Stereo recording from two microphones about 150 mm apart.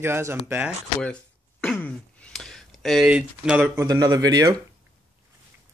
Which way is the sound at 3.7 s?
25° right (ahead or behind).